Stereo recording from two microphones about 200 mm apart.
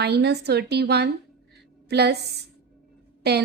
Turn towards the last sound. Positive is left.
turn(degrees=-55)  # may be behind; listen again after turning